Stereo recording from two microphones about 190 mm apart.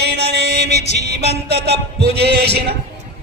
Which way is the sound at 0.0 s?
60° right (ahead or behind).